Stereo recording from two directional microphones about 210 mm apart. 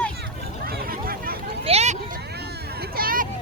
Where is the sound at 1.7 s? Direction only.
30° right (ahead or behind).